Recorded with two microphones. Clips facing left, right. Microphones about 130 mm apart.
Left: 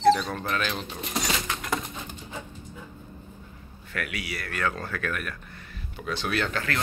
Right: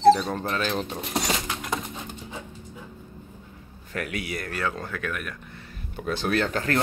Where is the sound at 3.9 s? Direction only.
40° right (ahead or behind).